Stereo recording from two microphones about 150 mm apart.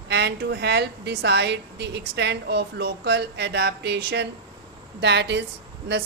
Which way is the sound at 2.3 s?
90° right.